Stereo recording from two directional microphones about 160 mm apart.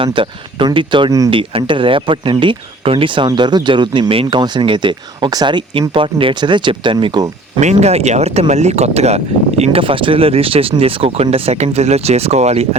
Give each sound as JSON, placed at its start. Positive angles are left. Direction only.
{"t": 0.0, "sound": "speech", "side_deg": -30}
{"t": 7.6, "sound": "speech", "side_deg": -45}